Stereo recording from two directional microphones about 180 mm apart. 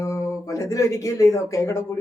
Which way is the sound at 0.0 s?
20° left (ahead or behind).